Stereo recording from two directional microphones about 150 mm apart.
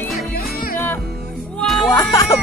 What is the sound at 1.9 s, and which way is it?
Speech, 20° left (ahead or behind).